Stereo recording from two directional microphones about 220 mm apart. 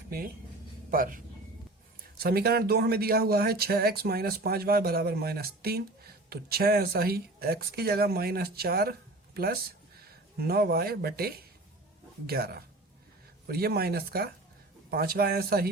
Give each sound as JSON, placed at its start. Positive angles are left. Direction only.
{"t": 0.9, "sound": "speech", "side_deg": -40}